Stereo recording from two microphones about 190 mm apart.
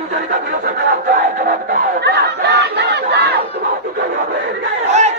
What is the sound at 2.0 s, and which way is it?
Battle cry, 60° right (ahead or behind).